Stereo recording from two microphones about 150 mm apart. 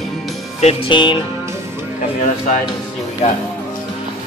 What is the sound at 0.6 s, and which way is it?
Music, 40° left (ahead or behind).